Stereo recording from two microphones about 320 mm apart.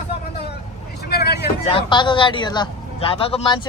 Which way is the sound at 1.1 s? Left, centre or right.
Left.